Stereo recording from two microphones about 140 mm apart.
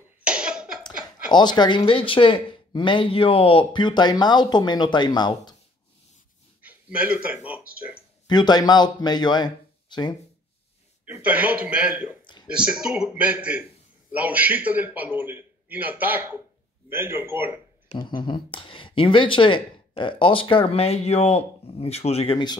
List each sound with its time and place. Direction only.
0.2 s cough: 5° right (ahead or behind)
1.3 s speech: 30° left (ahead or behind)
6.6 s speech: 10° right (ahead or behind)
8.3 s speech: 30° left (ahead or behind)
11.1 s a man's voice: 10° right (ahead or behind)
17.9 s speech: 35° left (ahead or behind)